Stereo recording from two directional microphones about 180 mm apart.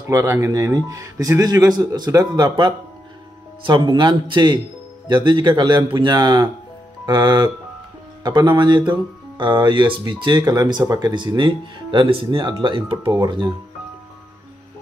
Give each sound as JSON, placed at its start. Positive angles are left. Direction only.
{"t": 0.1, "sound": "speech", "side_deg": -15}